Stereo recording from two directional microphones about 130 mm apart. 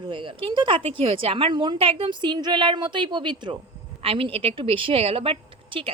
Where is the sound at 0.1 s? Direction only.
40° right (ahead or behind).